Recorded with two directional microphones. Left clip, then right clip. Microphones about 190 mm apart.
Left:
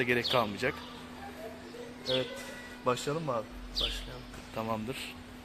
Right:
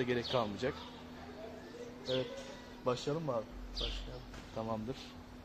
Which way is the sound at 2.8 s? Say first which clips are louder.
Left 4 dB; 20° left (ahead or behind).